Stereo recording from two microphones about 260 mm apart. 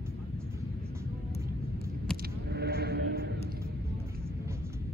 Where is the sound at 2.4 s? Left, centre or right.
Right.